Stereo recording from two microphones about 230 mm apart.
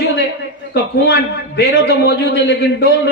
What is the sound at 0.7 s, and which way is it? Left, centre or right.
A man's voice, left.